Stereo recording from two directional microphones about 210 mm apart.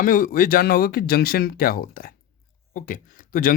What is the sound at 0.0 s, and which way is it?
Speech, 40° left (ahead or behind).